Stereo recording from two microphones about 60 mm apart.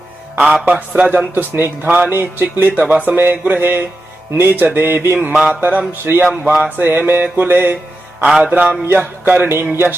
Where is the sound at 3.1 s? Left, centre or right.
Right.